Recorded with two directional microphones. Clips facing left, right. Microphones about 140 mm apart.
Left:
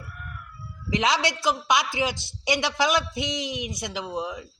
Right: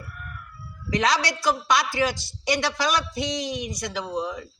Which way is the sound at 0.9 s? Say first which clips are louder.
Right 1 dB; 20° left (ahead or behind).